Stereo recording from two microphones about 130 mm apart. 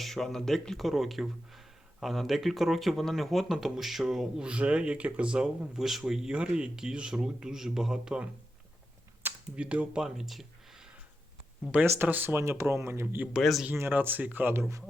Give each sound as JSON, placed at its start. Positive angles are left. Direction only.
{"t": 0.0, "sound": "speech", "side_deg": 0}
{"t": 11.7, "sound": "speech", "side_deg": -15}
{"t": 13.3, "sound": "speech", "side_deg": 0}
{"t": 13.7, "sound": "speech", "side_deg": -15}